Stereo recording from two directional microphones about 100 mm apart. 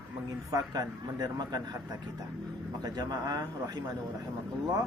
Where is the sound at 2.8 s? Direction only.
40° right (ahead or behind).